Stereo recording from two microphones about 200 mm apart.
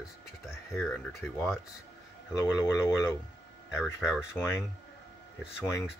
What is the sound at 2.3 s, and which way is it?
Speech, 15° left (ahead or behind).